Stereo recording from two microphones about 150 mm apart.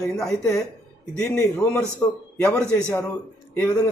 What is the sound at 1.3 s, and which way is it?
A man's voice, 15° left (ahead or behind).